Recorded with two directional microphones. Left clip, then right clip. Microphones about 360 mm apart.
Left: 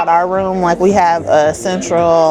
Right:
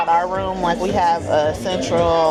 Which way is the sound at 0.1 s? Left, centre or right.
Left.